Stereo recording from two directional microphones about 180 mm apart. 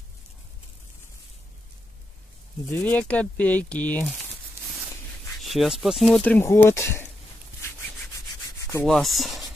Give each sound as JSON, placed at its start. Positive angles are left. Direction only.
{"t": 2.7, "sound": "speech", "side_deg": 10}
{"t": 5.4, "sound": "speech", "side_deg": 0}
{"t": 8.5, "sound": "rub", "side_deg": 15}
{"t": 8.8, "sound": "speech", "side_deg": 0}